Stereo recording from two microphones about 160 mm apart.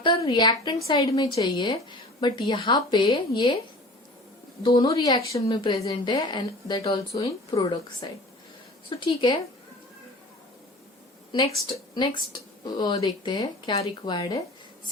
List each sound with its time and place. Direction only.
0.0 s a woman's voice: 30° left (ahead or behind)
4.6 s a woman's voice: 30° left (ahead or behind)
11.3 s a woman's voice: 35° left (ahead or behind)